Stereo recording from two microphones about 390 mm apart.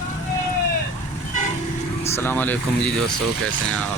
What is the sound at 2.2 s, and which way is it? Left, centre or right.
Speech, centre.